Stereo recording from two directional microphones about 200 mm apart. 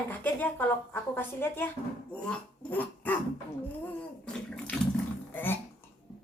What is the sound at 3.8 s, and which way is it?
Bathtub, 5° left (ahead or behind).